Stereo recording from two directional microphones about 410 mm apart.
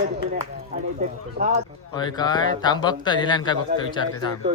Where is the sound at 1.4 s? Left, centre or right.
Centre.